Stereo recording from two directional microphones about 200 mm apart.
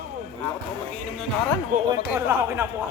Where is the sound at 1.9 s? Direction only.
10° right (ahead or behind).